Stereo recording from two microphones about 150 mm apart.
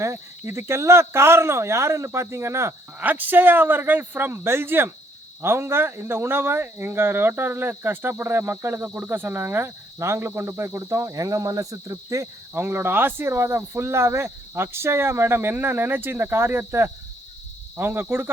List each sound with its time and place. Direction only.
0.0 s speech: 20° right (ahead or behind)